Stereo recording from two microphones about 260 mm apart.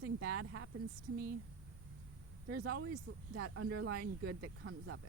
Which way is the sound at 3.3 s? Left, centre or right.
Right.